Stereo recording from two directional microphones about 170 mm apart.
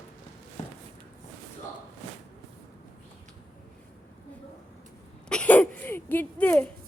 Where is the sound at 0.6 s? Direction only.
40° left (ahead or behind).